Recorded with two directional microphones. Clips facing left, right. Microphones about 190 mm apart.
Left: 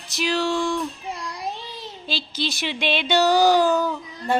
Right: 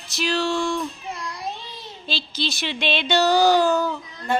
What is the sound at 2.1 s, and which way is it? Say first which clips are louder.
Speech: even; 15° left (ahead or behind).